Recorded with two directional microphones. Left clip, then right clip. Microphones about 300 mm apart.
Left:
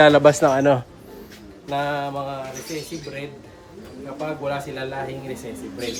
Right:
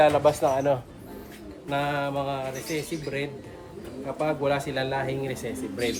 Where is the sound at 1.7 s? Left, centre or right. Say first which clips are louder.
Left 3 dB; centre.